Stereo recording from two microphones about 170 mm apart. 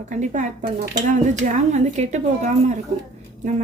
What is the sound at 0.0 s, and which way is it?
Speech, 45° right (ahead or behind).